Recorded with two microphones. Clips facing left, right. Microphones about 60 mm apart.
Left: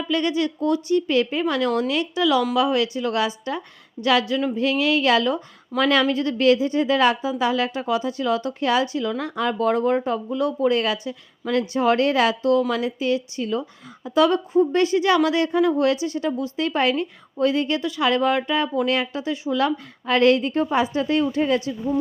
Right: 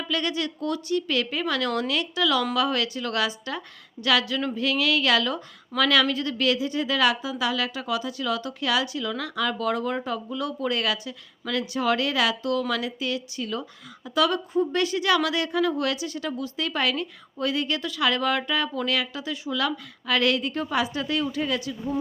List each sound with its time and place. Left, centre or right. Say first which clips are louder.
0.1 s a woman's voice: left 6 dB; left